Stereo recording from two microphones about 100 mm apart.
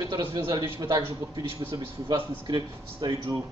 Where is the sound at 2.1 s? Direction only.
45° right (ahead or behind).